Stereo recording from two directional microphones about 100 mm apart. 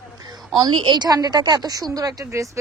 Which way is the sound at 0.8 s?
45° right (ahead or behind).